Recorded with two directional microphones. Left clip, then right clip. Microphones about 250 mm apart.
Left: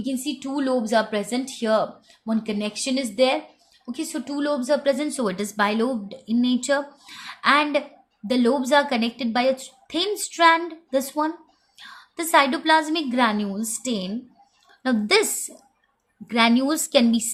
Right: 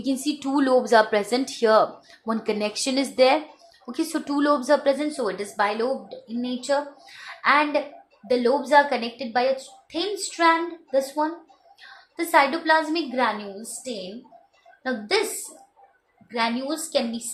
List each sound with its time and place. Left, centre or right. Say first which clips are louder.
0.3 s a woman's voice: right 4 dB; centre; by 15.2 s left
16.3 s a woman's voice: left 6 dB; left